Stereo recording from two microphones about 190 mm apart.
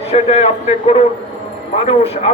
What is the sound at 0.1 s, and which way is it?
A man's voice, 30° left (ahead or behind).